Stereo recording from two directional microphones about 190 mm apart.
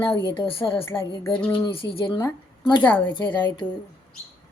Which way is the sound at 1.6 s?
25° left (ahead or behind).